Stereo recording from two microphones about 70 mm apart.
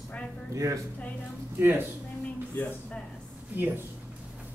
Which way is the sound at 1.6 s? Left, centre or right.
Right.